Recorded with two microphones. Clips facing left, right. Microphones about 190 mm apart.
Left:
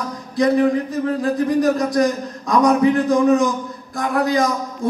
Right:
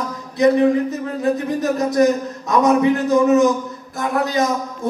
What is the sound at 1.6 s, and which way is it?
A man's voice, 25° right (ahead or behind).